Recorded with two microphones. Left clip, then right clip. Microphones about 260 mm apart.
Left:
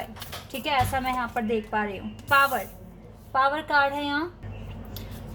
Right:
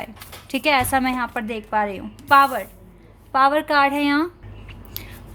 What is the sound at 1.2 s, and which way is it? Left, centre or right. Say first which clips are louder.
Speech: right 1 dB; right.